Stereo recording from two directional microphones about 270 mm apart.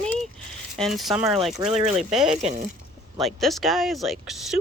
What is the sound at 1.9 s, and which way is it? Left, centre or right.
Speech, centre.